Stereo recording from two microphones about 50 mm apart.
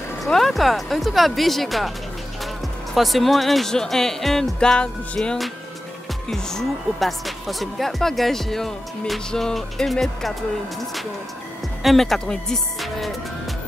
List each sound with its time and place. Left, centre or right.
0.2 s speech: centre
2.9 s speech: centre
3.7 s music: centre
4.6 s music: centre
6.2 s speech: centre
9.3 s music: centre
11.8 s speech: centre
12.8 s music: centre